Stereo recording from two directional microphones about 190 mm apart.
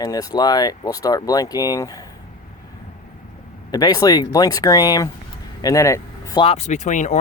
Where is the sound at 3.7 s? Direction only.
20° left (ahead or behind).